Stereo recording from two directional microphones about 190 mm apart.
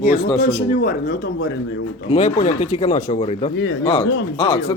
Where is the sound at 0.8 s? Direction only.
50° left (ahead or behind).